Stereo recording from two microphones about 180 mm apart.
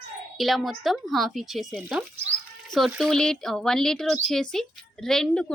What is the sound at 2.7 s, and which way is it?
Speech, centre (ahead or behind).